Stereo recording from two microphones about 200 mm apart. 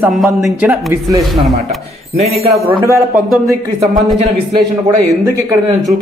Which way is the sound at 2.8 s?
15° right (ahead or behind).